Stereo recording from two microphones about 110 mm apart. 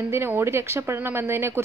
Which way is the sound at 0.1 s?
20° right (ahead or behind).